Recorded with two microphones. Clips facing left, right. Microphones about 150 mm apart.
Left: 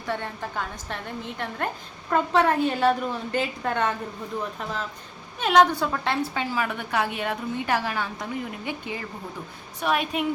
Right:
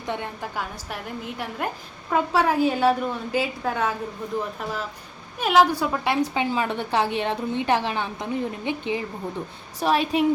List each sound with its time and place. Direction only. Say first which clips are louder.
0.0 s a woman's voice: even; 15° right (ahead or behind)
5.4 s a woman's voice: even; 5° right (ahead or behind); by 9.0 s 20° right (ahead or behind)
9.8 s a woman's voice: right 4 dB; 30° right (ahead or behind)